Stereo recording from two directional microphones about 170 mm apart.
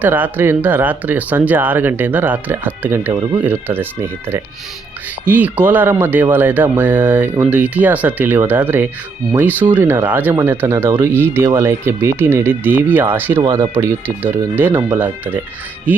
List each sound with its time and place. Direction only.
0.0 s speech: 10° right (ahead or behind)
3.1 s speech: 25° right (ahead or behind)
3.4 s speech: 10° right (ahead or behind)